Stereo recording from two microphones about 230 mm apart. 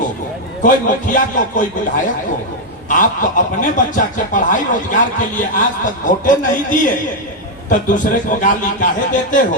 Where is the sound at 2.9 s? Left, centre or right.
Left.